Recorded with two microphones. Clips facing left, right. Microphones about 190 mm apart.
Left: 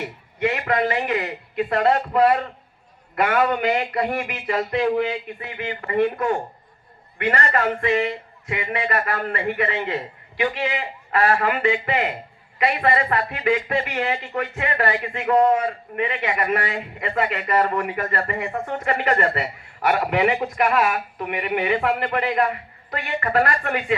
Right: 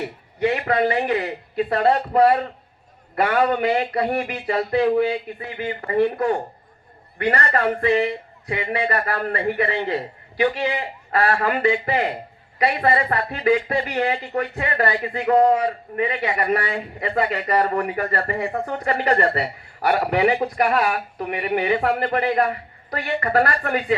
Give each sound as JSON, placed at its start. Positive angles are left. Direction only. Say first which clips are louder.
{"t": 0.0, "sound": "speech", "louder": "right 2 dB", "side_deg": -35}